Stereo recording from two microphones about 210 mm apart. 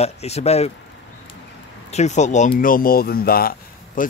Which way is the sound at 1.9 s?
35° left (ahead or behind).